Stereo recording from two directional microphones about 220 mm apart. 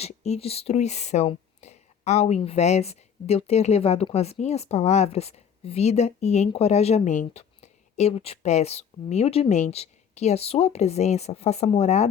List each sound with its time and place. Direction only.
0.0 s speech: 30° left (ahead or behind)